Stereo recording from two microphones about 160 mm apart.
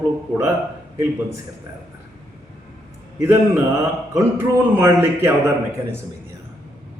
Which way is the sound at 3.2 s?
15° right (ahead or behind).